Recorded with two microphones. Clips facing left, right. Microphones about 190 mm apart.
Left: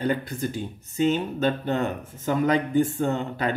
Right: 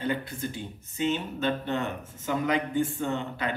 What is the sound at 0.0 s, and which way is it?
A man's voice, 40° left (ahead or behind).